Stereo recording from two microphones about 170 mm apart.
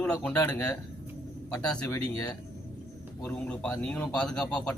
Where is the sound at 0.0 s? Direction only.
10° left (ahead or behind).